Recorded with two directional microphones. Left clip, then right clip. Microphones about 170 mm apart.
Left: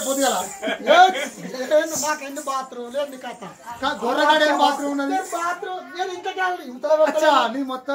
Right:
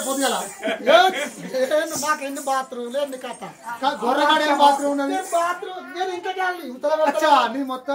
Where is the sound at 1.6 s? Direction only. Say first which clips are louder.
Left 3 dB; 35° right (ahead or behind).